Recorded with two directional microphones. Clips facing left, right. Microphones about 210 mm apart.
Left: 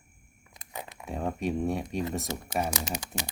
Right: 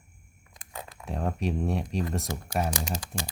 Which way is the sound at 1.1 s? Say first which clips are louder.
Even; centre (ahead or behind).